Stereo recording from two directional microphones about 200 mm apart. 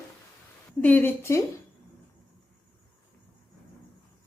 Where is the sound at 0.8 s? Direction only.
10° left (ahead or behind).